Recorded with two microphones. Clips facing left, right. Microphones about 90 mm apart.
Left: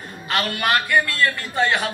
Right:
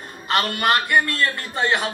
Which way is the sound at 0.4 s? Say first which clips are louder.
Even; 35° right (ahead or behind).